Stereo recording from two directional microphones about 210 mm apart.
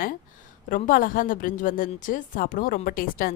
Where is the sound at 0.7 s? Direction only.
40° left (ahead or behind).